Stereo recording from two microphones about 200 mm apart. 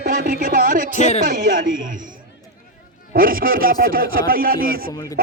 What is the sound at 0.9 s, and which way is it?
Speech, 35° left (ahead or behind).